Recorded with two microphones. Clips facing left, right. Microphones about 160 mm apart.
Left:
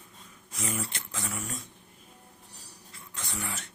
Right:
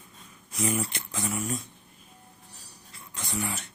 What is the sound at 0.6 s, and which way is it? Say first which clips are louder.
Speech: right 6 dB; 15° right (ahead or behind).